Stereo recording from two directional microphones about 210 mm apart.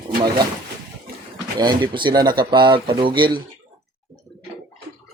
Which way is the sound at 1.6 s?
20° right (ahead or behind).